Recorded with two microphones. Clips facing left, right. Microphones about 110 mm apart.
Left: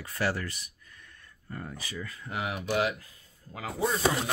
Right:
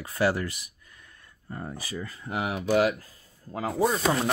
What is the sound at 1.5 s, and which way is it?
Speech, 30° right (ahead or behind).